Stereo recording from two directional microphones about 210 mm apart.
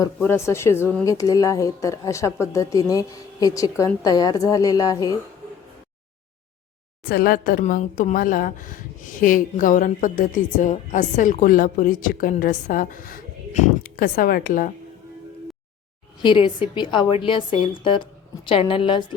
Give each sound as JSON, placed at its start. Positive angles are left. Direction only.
{"t": 0.0, "sound": "a woman's voice", "side_deg": 10}
{"t": 7.0, "sound": "speech", "side_deg": 45}
{"t": 16.2, "sound": "a woman's voice", "side_deg": 20}